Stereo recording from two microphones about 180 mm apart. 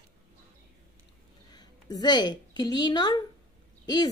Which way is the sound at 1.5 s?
25° left (ahead or behind).